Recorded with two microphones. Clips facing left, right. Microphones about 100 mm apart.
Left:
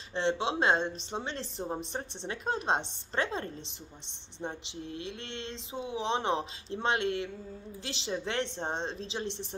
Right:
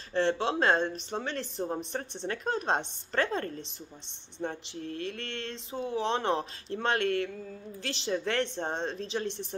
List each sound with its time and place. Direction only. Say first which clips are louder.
0.1 s speech: right 2 dB; 20° left (ahead or behind)